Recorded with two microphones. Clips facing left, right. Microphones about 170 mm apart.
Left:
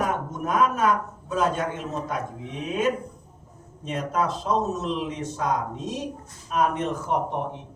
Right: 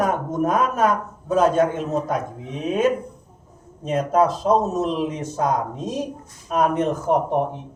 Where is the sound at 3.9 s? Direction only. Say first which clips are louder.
Right 7 dB; 40° right (ahead or behind).